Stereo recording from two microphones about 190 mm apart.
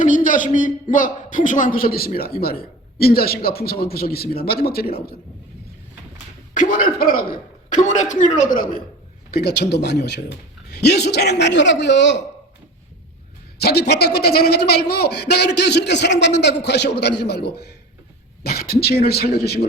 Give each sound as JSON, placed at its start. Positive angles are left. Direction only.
{"t": 0.0, "sound": "a man's voice", "side_deg": 45}
{"t": 6.5, "sound": "a man's voice", "side_deg": 45}
{"t": 13.6, "sound": "a man's voice", "side_deg": 55}